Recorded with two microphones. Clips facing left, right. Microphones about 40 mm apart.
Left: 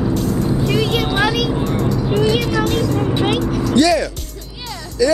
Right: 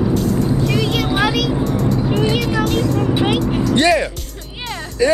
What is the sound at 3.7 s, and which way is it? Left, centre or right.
Speech, right.